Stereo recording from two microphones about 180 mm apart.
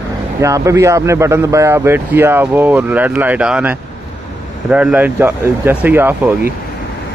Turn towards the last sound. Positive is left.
turn(degrees=-10)  # may be behind; listen again after turning